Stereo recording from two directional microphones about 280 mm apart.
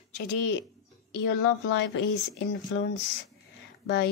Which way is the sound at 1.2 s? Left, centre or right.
Left.